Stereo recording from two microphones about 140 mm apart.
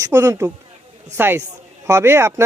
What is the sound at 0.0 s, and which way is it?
Speech, 20° right (ahead or behind).